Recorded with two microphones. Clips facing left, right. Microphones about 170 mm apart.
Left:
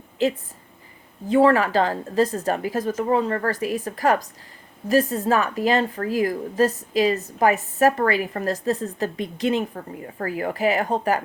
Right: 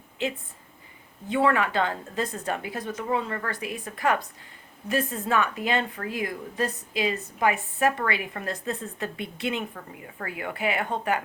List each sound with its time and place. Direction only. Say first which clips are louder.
0.2 s a woman's voice: left 8 dB; 40° left (ahead or behind)